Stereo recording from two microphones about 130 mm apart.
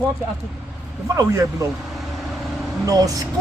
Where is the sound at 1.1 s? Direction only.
25° right (ahead or behind).